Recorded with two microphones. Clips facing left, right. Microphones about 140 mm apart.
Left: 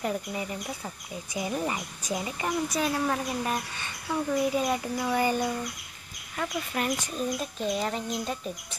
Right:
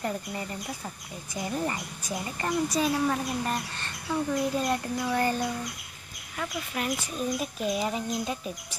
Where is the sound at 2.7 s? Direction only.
Centre (ahead or behind).